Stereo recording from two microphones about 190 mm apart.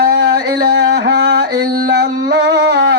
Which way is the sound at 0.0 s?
60° right (ahead or behind).